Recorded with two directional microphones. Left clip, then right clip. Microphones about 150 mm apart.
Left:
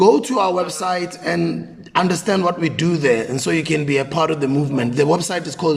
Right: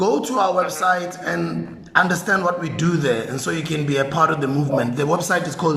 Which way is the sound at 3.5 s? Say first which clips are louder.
Left 6 dB; 35° right (ahead or behind).